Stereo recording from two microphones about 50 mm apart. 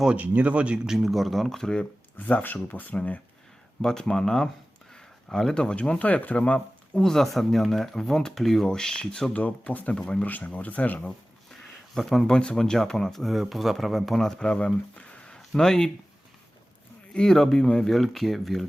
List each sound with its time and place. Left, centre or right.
0.1 s speech: right
0.9 s speech: centre
2.1 s speech: left
3.8 s speech: centre
7.0 s speech: centre
9.3 s speech: left
10.2 s speech: left
11.6 s a sound: centre
12.3 s speech: centre
15.4 s speech: centre
17.2 s speech: centre